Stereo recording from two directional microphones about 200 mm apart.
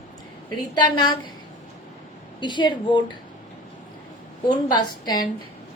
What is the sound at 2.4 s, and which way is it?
Speech, 20° left (ahead or behind).